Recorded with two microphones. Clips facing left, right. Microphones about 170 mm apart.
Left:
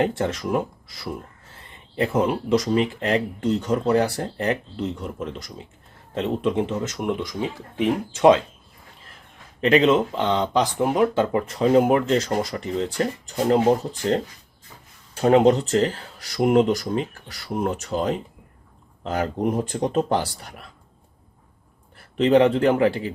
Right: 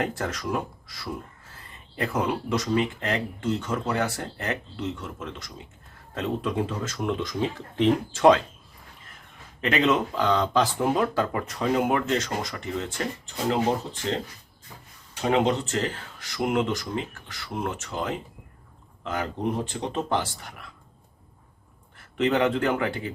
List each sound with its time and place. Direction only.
0.0 s speech: 25° left (ahead or behind)
9.6 s speech: 30° left (ahead or behind)
15.1 s speech: 40° left (ahead or behind)
22.2 s speech: 30° left (ahead or behind)